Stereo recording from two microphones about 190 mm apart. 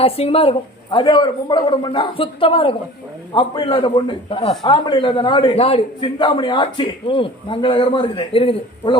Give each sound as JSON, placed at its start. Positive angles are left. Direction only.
{"t": 0.0, "sound": "a man's voice", "side_deg": 30}